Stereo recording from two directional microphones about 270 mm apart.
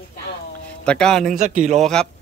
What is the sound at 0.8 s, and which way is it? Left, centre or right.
Speech, centre.